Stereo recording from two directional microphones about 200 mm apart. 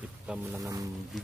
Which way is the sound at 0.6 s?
15° right (ahead or behind).